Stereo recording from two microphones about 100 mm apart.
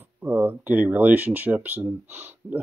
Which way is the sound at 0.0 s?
15° right (ahead or behind).